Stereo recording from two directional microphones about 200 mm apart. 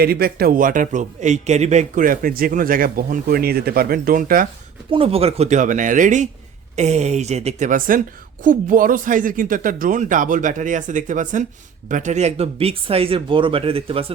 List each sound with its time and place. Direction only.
0.0 s a man's voice: 50° right (ahead or behind)
4.9 s speech: 30° right (ahead or behind)